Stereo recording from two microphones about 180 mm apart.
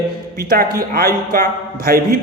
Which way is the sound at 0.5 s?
55° right (ahead or behind).